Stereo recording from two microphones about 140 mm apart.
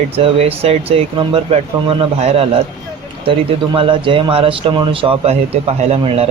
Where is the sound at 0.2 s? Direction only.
45° right (ahead or behind).